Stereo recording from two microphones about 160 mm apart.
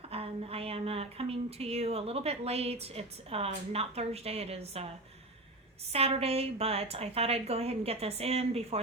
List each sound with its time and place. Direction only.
0.1 s a woman's voice: 40° right (ahead or behind)
5.9 s a woman's voice: 40° right (ahead or behind)